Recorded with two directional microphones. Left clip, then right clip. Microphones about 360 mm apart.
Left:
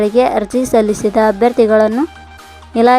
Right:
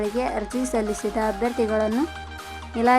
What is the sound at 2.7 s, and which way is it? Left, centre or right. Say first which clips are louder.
Music: left 10 dB; centre.